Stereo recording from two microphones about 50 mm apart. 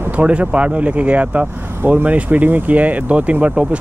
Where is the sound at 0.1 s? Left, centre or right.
Right.